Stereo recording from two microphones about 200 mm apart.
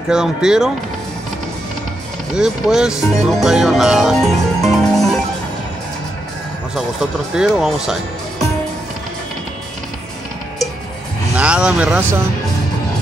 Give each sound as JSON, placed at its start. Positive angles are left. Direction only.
{"t": 0.1, "sound": "speech", "side_deg": -5}
{"t": 2.3, "sound": "speech", "side_deg": -5}
{"t": 6.7, "sound": "speech", "side_deg": 0}
{"t": 11.3, "sound": "speech", "side_deg": -5}